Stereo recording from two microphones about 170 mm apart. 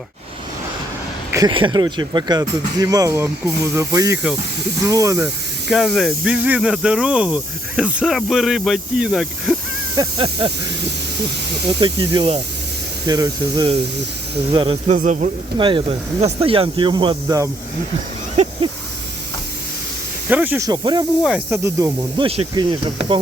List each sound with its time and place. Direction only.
1.3 s speech: 25° right (ahead or behind)
5.2 s speech: centre (ahead or behind)
9.9 s speech: 25° right (ahead or behind)
11.8 s snake: 30° right (ahead or behind)
13.1 s speech: 20° right (ahead or behind)
14.8 s speech: 45° right (ahead or behind)
15.5 s speech: 30° right (ahead or behind)
18.4 s snake: 40° right (ahead or behind)
20.3 s snake: 10° right (ahead or behind)
20.7 s speech: 25° right (ahead or behind)
21.5 s snake: 15° right (ahead or behind)
22.2 s snake: 30° right (ahead or behind)